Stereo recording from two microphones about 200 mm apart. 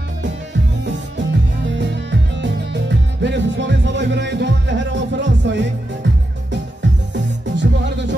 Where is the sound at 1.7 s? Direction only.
60° right (ahead or behind).